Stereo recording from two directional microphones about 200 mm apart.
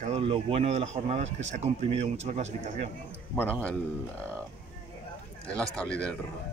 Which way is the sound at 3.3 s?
10° left (ahead or behind).